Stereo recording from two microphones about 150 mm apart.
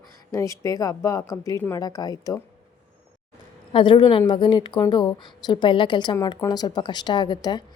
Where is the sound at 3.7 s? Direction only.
35° left (ahead or behind).